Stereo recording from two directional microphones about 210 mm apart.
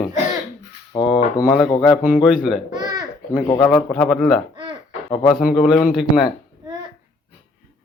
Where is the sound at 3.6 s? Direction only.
Centre (ahead or behind).